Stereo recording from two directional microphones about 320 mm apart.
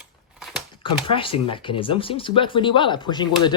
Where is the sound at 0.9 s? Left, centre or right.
Centre.